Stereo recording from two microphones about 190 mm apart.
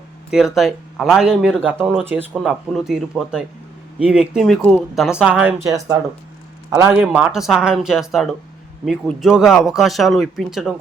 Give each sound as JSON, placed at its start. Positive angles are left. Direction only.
{"t": 0.3, "sound": "speech", "side_deg": 0}